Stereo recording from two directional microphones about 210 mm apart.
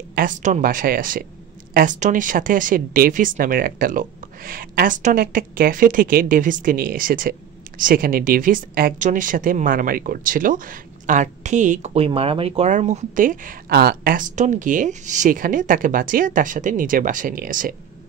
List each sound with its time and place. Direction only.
0.1 s a woman's voice: 40° right (ahead or behind)